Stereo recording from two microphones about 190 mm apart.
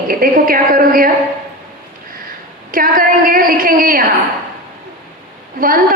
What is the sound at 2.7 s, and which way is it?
A woman's voice, 45° right (ahead or behind).